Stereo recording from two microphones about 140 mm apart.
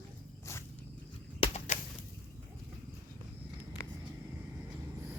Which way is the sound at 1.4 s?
50° left (ahead or behind).